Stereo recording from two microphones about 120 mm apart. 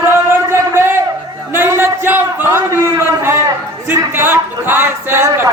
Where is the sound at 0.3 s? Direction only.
20° right (ahead or behind).